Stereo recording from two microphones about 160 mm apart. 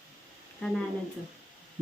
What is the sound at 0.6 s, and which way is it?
Speech, 5° left (ahead or behind).